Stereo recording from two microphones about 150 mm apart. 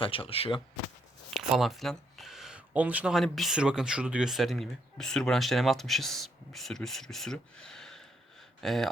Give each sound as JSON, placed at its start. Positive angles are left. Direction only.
{"t": 0.0, "sound": "speech", "side_deg": 35}
{"t": 1.3, "sound": "speech", "side_deg": 0}